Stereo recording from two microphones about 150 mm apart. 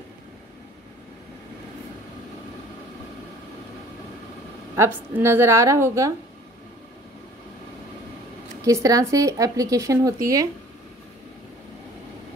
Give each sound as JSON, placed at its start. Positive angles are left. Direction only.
{"t": 4.7, "sound": "a woman's voice", "side_deg": -15}
{"t": 8.6, "sound": "speech", "side_deg": -25}